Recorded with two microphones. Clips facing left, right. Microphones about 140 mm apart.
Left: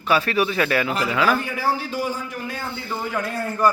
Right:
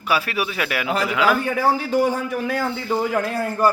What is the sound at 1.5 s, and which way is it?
A man's voice, 55° right (ahead or behind).